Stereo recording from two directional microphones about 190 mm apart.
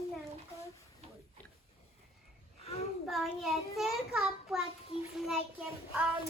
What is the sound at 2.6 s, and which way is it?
Child singing, 30° left (ahead or behind).